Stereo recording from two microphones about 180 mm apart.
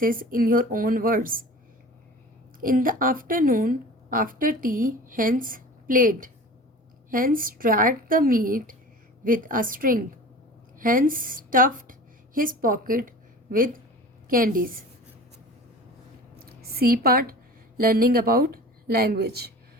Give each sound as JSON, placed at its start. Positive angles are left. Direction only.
{"t": 0.0, "sound": "a woman's voice", "side_deg": -50}
{"t": 2.6, "sound": "a woman's voice", "side_deg": -50}
{"t": 16.5, "sound": "a woman's voice", "side_deg": -55}